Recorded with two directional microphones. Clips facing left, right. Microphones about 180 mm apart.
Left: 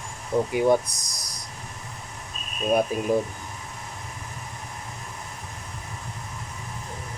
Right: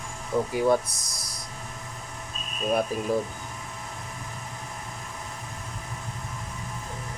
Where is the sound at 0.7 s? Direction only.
15° left (ahead or behind).